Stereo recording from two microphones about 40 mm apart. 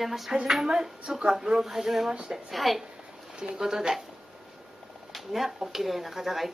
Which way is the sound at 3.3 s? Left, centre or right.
Centre.